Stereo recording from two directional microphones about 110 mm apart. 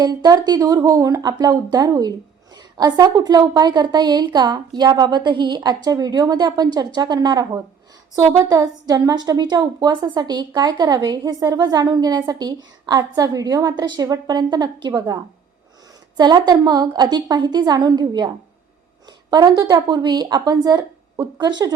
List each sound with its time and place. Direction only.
0.0 s a woman's voice: 40° right (ahead or behind)